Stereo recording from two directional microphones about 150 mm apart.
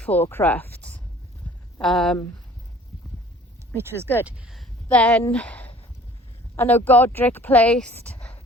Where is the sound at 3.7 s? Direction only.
15° right (ahead or behind).